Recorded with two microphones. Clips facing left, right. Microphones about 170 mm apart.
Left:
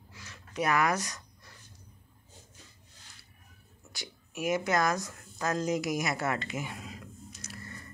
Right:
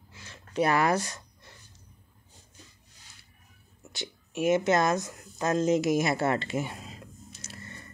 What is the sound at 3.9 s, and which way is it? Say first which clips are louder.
Speech: right 6 dB; 25° right (ahead or behind).